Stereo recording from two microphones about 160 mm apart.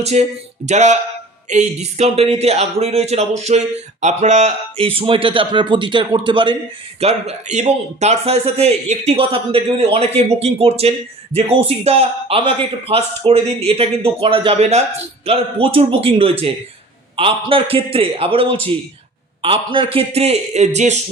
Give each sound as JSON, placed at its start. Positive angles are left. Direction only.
{"t": 0.0, "sound": "a man's voice", "side_deg": -45}
{"t": 7.0, "sound": "a man's voice", "side_deg": -40}